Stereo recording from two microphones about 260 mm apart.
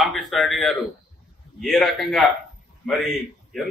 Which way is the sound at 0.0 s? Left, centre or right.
Centre.